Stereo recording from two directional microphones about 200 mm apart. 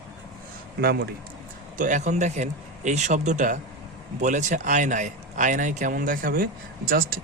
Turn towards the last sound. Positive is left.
turn(degrees=-45)  # may be behind; listen again after turning